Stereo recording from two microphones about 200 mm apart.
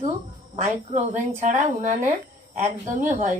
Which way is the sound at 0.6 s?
35° right (ahead or behind).